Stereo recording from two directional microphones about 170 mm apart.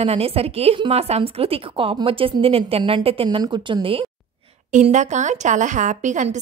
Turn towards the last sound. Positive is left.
turn(degrees=-45)  # may be behind; listen again after turning